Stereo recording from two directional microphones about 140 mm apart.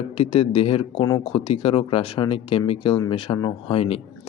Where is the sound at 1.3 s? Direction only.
40° left (ahead or behind).